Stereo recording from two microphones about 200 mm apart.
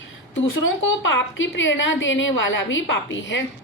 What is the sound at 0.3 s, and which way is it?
A woman's voice, 75° left (ahead or behind).